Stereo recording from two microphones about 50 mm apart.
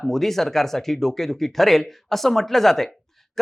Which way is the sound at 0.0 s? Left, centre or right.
Centre.